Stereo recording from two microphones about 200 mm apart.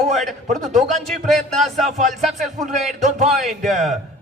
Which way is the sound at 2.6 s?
35° right (ahead or behind).